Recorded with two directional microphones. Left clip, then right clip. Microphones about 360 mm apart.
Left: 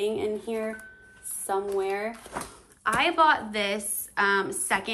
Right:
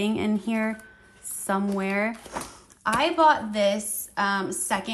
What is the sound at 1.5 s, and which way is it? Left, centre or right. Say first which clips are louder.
A woman's voice: even; centre.